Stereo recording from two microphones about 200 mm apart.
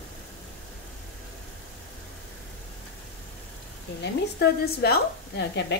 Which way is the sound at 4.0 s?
55° left (ahead or behind).